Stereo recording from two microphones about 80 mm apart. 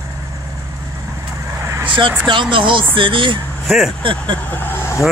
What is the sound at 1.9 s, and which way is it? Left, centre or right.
Speech, right.